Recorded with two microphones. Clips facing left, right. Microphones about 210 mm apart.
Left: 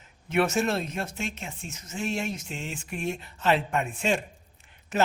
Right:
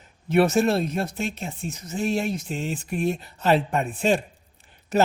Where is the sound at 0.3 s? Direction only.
35° right (ahead or behind).